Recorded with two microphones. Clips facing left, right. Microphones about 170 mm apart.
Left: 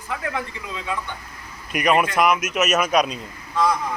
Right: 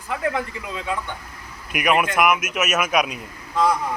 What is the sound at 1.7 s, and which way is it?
Speech, 5° right (ahead or behind).